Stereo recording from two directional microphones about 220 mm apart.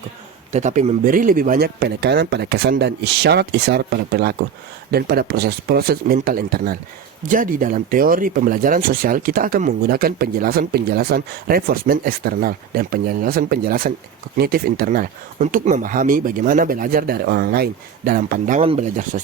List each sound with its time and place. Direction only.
0.5 s a man's voice: 30° right (ahead or behind)